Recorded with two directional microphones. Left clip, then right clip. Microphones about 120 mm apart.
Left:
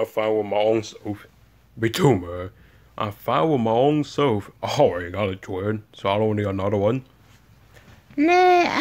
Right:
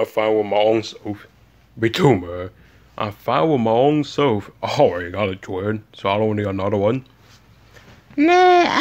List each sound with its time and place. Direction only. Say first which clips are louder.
0.0 s speech: right 4 dB; 20° right (ahead or behind)
1.0 s speech: right 2 dB; 5° left (ahead or behind)
8.2 s speech: right 3 dB; 10° right (ahead or behind)